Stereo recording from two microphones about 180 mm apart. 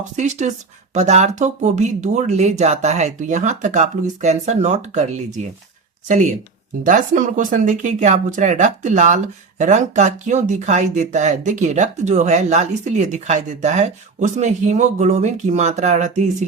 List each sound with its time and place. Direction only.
0.2 s speech: 40° right (ahead or behind)